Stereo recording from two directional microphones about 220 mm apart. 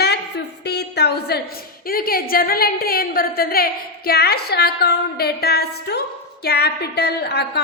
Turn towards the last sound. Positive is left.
turn(degrees=50)  # may be behind; listen again after turning